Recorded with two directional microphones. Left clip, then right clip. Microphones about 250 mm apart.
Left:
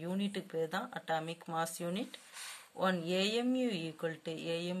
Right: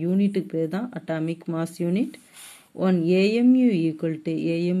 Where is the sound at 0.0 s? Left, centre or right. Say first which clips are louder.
Right 14 dB; centre.